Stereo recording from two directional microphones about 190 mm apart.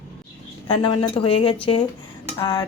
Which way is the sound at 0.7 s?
25° left (ahead or behind).